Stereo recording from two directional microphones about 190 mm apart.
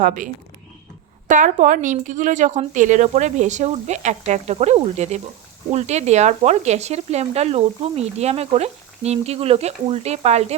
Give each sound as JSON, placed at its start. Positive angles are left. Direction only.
{"t": 0.0, "sound": "speech", "side_deg": -45}
{"t": 1.3, "sound": "speech", "side_deg": -40}